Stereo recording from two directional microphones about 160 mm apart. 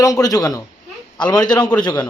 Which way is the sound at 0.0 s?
20° left (ahead or behind).